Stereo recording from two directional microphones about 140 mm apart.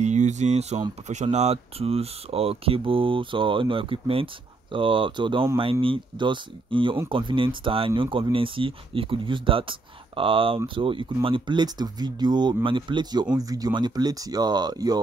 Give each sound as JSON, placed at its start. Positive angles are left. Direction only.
{"t": 0.0, "sound": "speech", "side_deg": -55}